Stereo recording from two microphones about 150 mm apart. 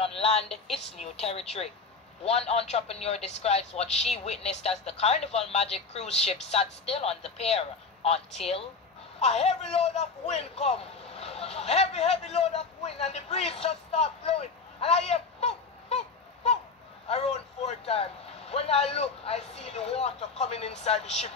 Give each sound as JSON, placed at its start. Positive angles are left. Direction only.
{"t": 0.0, "sound": "a sound", "side_deg": 40}
{"t": 1.1, "sound": "a man's voice", "side_deg": 45}
{"t": 17.1, "sound": "speech", "side_deg": 45}